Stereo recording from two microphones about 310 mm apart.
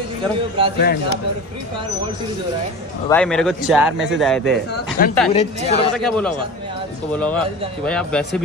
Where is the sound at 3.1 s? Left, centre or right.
Centre.